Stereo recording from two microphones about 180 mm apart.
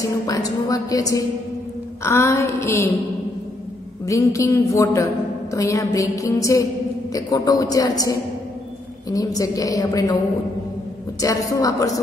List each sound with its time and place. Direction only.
0.3 s a man's voice: 20° left (ahead or behind)
4.0 s a woman's voice: 15° left (ahead or behind)
11.1 s a man's voice: 20° left (ahead or behind)